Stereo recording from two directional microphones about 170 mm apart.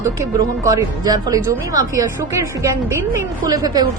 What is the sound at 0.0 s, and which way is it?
A woman's voice, 15° right (ahead or behind).